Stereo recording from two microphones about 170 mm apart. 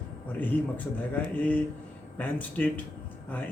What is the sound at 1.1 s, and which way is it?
Speech, 10° left (ahead or behind).